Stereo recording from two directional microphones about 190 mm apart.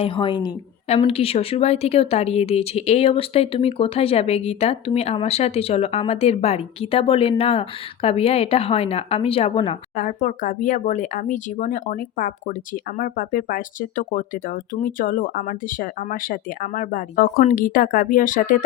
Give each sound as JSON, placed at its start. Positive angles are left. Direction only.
{"t": 0.0, "sound": "a woman's voice", "side_deg": 25}
{"t": 10.0, "sound": "speech", "side_deg": 45}